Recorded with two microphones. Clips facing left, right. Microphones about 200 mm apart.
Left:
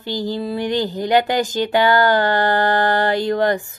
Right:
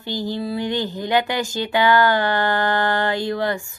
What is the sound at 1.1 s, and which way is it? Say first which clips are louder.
Speech: left 4 dB; 40° left (ahead or behind).